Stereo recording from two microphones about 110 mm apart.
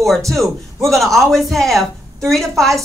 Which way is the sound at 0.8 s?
Centre (ahead or behind).